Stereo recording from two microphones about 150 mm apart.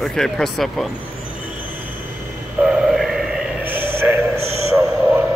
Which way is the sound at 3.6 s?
15° right (ahead or behind).